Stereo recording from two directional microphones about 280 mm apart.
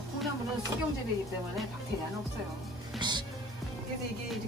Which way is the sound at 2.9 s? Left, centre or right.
Centre.